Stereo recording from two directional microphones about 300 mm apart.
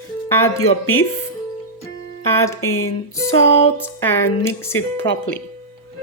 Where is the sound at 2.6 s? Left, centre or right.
Left.